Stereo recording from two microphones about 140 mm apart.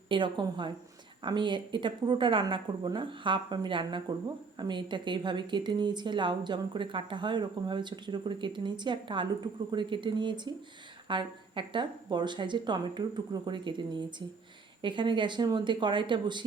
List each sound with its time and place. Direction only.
0.1 s speech: 35° right (ahead or behind)